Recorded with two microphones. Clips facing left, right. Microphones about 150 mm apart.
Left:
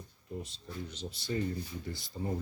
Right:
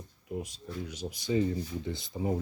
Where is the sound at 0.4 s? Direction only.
10° right (ahead or behind).